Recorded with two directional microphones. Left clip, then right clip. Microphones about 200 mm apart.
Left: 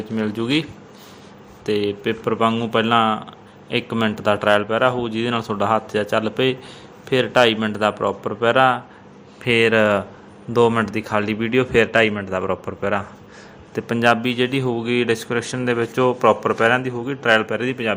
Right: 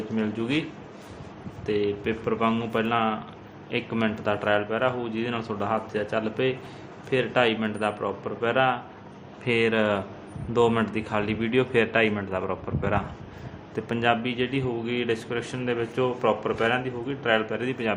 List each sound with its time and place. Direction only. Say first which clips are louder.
0.2 s speech: left 6 dB; 30° left (ahead or behind)
1.6 s a man's voice: left 5 dB; 35° left (ahead or behind)